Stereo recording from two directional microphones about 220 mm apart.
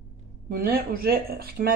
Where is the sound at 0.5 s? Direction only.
40° right (ahead or behind).